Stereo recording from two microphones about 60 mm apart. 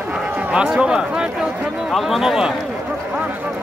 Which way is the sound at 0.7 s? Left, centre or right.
Centre.